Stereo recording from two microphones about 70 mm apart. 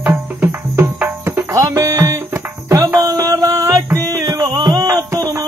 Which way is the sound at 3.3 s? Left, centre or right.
Right.